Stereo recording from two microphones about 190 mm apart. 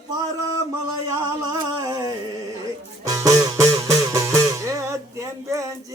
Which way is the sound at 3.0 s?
15° right (ahead or behind).